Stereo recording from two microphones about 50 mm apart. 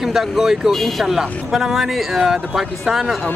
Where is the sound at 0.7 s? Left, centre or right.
Centre.